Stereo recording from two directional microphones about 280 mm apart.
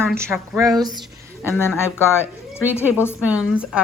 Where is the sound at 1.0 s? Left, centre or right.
Centre.